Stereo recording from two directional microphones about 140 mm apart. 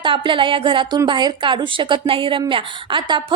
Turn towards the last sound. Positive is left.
turn(degrees=-35)  # may be behind; listen again after turning